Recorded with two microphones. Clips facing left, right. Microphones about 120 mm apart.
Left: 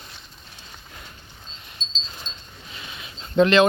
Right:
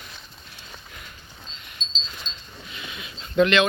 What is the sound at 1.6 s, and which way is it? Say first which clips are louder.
Wind chime: even; 30° left (ahead or behind).